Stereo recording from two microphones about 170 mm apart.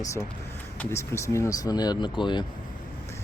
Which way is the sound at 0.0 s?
20° left (ahead or behind).